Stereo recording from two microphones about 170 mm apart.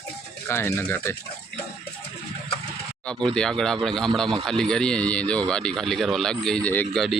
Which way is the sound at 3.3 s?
5° left (ahead or behind).